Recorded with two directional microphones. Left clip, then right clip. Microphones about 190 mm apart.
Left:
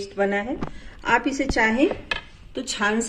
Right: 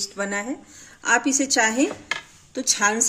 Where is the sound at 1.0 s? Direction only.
55° right (ahead or behind).